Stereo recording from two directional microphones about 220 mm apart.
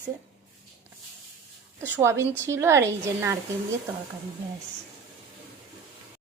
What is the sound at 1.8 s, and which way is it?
A woman's voice, 10° right (ahead or behind).